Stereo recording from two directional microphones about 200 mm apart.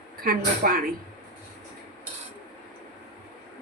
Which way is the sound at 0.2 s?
45° right (ahead or behind).